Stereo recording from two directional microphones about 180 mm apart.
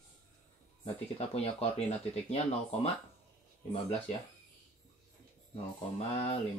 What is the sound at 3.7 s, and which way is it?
Speech, 35° left (ahead or behind).